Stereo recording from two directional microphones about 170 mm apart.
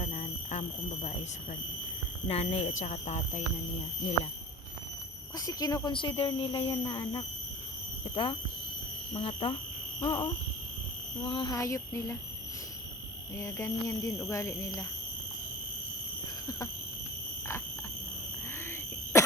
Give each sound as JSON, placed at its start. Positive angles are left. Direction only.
{"t": 0.0, "sound": "a sound", "side_deg": 40}
{"t": 2.2, "sound": "speech", "side_deg": 35}
{"t": 5.4, "sound": "speech", "side_deg": 20}
{"t": 13.3, "sound": "speech", "side_deg": 15}